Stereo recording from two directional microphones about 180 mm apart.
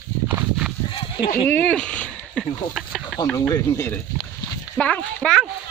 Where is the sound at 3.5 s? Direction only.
15° left (ahead or behind).